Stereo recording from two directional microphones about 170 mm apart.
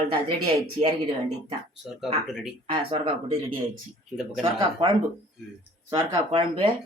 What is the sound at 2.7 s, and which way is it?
Speech, 25° right (ahead or behind).